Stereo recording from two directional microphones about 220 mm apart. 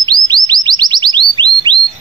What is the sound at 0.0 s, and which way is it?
Bird, 20° right (ahead or behind).